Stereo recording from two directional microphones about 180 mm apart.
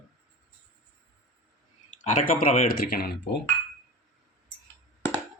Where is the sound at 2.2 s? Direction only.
45° left (ahead or behind).